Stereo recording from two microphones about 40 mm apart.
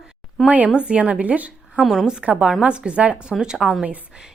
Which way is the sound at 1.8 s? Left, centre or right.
Centre.